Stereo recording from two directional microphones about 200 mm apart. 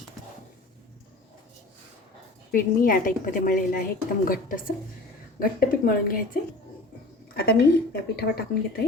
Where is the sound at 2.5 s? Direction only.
45° left (ahead or behind).